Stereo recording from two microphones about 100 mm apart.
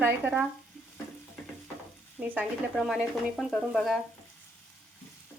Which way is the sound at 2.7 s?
5° right (ahead or behind).